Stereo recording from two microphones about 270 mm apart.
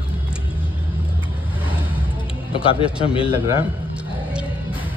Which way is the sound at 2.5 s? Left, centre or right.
Centre.